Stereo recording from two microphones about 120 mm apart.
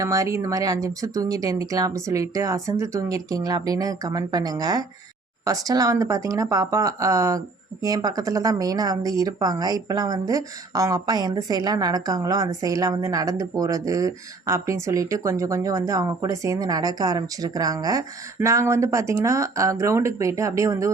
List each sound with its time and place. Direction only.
0.0 s speech: 25° right (ahead or behind)